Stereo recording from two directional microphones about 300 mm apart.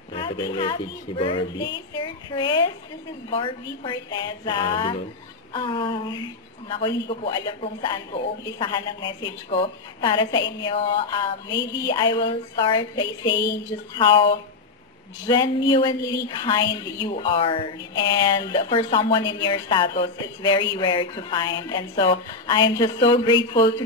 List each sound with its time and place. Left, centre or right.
0.1 s a woman's voice: centre